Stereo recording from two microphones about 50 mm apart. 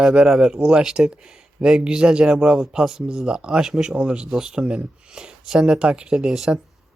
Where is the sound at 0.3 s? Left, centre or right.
Centre.